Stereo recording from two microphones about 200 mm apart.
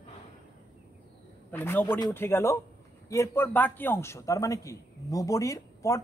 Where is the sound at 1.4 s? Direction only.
10° left (ahead or behind).